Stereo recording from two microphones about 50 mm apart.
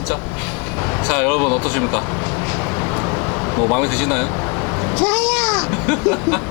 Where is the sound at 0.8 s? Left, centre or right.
Left.